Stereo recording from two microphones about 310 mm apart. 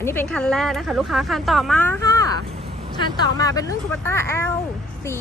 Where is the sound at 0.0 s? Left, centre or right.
Centre.